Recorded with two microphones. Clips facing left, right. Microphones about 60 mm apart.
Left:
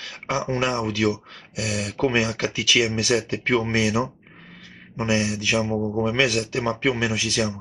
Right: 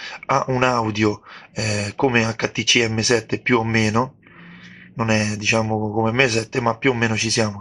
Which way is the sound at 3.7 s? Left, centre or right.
Right.